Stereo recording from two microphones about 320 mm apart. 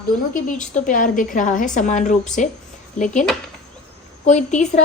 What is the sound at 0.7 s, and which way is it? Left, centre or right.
A woman's voice, left.